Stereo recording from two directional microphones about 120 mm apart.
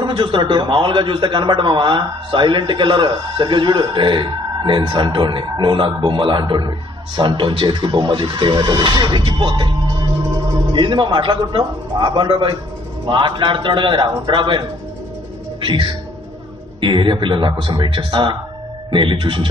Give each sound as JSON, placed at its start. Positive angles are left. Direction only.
{"t": 0.0, "sound": "a man's voice", "side_deg": -40}
{"t": 10.7, "sound": "a man's voice", "side_deg": -40}
{"t": 15.6, "sound": "a man's voice", "side_deg": -45}